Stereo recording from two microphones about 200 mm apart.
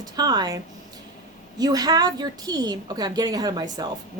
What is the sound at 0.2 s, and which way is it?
A woman's voice, 20° right (ahead or behind).